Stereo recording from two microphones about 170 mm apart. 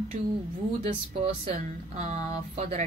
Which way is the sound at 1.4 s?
40° right (ahead or behind).